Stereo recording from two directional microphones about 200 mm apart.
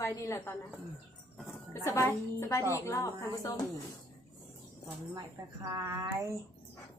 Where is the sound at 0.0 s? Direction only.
15° left (ahead or behind).